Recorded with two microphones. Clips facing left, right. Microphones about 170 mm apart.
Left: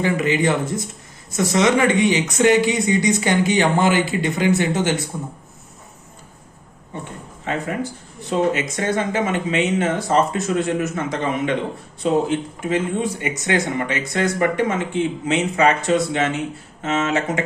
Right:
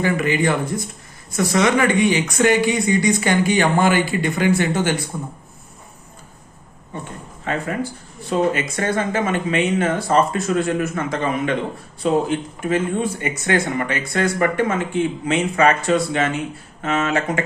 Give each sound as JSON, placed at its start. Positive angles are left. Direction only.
{"t": 0.0, "sound": "speech", "side_deg": 20}
{"t": 7.4, "sound": "speech", "side_deg": 20}